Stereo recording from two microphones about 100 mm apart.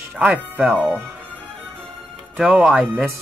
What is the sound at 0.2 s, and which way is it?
Speech, 10° right (ahead or behind).